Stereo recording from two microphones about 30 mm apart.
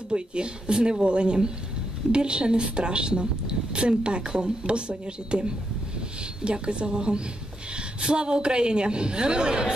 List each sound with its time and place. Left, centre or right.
0.1 s a woman's voice: right